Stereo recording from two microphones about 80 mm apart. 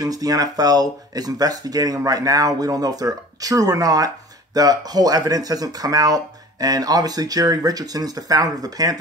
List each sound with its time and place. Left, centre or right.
0.0 s speech: right